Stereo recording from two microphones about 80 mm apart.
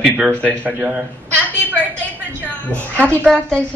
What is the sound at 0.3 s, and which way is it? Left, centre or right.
Speech, centre.